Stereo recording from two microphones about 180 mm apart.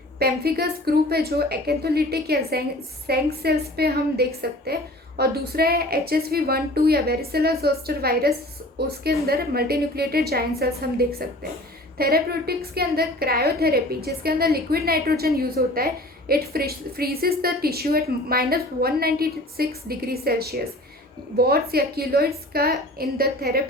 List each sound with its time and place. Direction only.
0.2 s a woman's voice: 60° right (ahead or behind)